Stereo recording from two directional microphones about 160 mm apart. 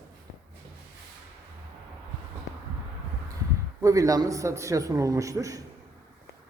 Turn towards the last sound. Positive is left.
turn(degrees=-20)  # may be behind; listen again after turning